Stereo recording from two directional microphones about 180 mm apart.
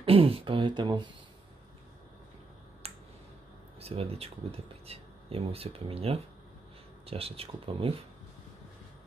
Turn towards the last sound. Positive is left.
turn(degrees=-30)  # may be behind; listen again after turning